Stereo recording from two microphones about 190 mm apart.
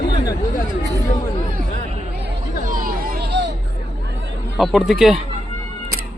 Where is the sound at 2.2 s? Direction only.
45° right (ahead or behind).